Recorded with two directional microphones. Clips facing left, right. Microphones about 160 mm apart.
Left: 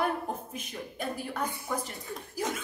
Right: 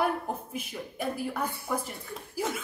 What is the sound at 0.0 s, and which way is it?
A woman's voice, 5° right (ahead or behind).